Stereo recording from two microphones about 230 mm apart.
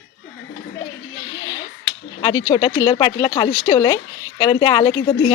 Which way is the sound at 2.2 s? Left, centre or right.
Centre.